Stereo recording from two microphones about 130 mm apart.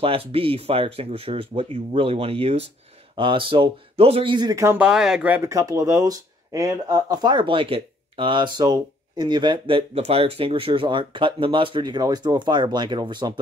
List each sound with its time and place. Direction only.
0.0 s speech: 45° right (ahead or behind)
3.9 s speech: 50° right (ahead or behind); by 4.7 s 25° right (ahead or behind)
4.7 s speech: 5° right (ahead or behind)
5.5 s speech: 25° right (ahead or behind)